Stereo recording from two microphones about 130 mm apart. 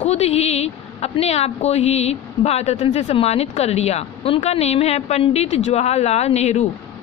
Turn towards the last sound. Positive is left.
turn(degrees=60)  # may be behind; listen again after turning